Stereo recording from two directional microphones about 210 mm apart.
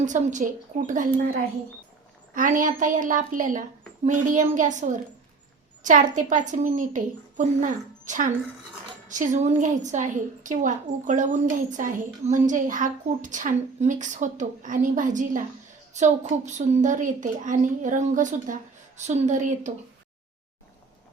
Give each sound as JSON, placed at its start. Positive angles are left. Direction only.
{"t": 0.0, "sound": "a woman's voice", "side_deg": -35}
{"t": 2.3, "sound": "a woman's voice", "side_deg": -40}